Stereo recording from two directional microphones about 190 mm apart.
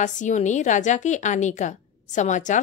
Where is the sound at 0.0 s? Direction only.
40° left (ahead or behind).